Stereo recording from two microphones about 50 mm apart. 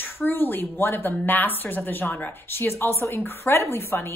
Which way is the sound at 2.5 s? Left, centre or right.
Left.